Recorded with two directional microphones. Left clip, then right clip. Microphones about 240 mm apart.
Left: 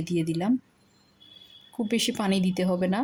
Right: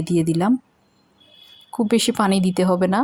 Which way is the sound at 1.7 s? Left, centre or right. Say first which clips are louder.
Right 8 dB; centre.